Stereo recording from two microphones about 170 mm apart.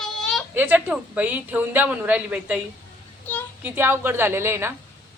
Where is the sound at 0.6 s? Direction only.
10° right (ahead or behind).